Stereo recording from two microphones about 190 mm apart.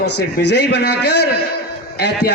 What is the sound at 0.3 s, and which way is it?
A man's voice, 65° left (ahead or behind).